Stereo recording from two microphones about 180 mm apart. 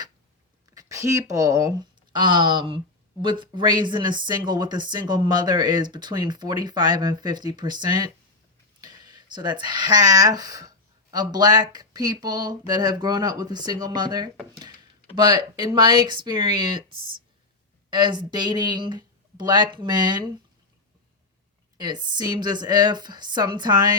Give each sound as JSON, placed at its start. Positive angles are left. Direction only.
{"t": 0.7, "sound": "speech", "side_deg": -20}
{"t": 17.9, "sound": "speech", "side_deg": -25}
{"t": 21.8, "sound": "speech", "side_deg": -25}